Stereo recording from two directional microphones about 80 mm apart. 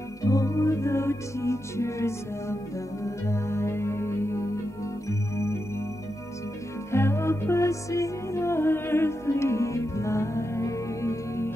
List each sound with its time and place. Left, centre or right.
0.2 s music: left
3.3 s music: left
6.9 s music: left